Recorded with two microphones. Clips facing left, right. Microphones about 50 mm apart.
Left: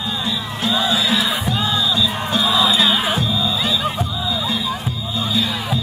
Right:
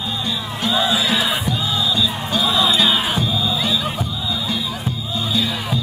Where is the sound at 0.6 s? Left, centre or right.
Centre.